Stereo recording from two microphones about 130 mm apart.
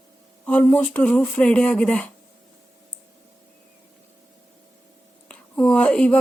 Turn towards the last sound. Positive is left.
turn(degrees=10)  # may be behind; listen again after turning